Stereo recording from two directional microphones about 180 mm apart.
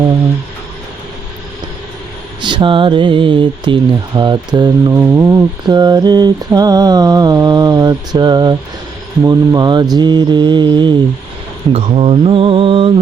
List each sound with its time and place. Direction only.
2.4 s speech: 25° right (ahead or behind)
11.7 s mantra: 35° right (ahead or behind)